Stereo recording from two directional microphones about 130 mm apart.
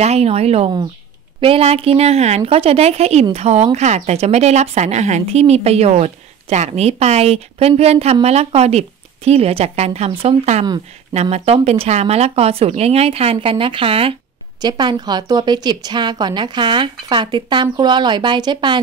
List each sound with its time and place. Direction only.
0.0 s a woman's voice: 55° right (ahead or behind)
14.6 s a woman's voice: 35° right (ahead or behind)